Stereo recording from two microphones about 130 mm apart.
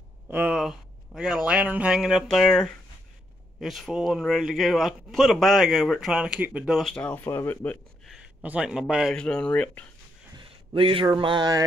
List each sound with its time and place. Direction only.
0.3 s a man's voice: 10° right (ahead or behind); by 7.8 s 15° left (ahead or behind)
8.1 s speech: 10° right (ahead or behind)
9.1 s speech: 5° left (ahead or behind)
10.3 s a sound: 40° right (ahead or behind)
11.1 s mantra: 35° right (ahead or behind)